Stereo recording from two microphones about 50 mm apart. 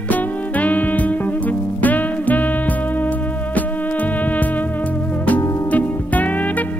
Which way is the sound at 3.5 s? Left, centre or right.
Left.